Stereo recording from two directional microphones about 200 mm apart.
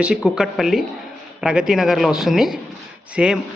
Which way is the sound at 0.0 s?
5° right (ahead or behind).